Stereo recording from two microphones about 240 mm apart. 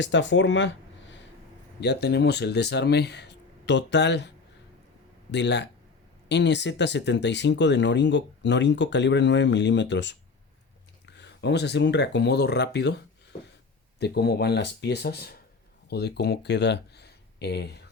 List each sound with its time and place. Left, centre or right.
0.0 s speech: left
1.8 s speech: left
5.3 s speech: left
13.3 s a sound: left
14.0 s speech: left